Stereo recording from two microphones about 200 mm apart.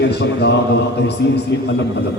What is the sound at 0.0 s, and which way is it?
Speech, 55° left (ahead or behind).